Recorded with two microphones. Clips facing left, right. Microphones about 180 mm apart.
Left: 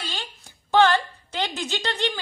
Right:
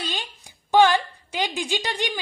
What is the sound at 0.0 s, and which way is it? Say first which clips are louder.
A woman's voice: right 3 dB; 15° right (ahead or behind).